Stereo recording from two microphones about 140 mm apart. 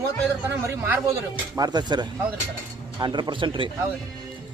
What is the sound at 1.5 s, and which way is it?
Speech, 30° right (ahead or behind).